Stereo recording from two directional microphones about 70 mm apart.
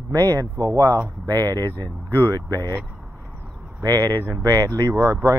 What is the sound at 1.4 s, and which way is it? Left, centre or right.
Speech, right.